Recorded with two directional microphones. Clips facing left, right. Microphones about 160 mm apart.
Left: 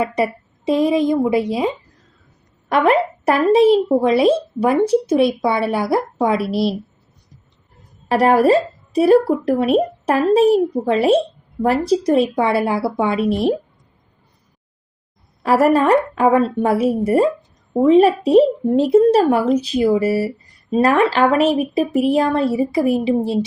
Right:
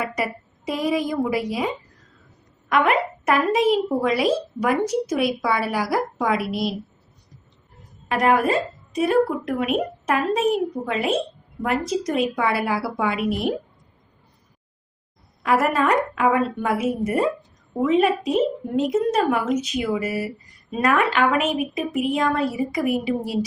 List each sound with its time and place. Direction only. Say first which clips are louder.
0.0 s a woman's voice: left 7 dB; 30° left (ahead or behind)
8.0 s a woman's voice: left 6 dB; 35° left (ahead or behind)
15.4 s a woman's voice: left 6 dB; 30° left (ahead or behind)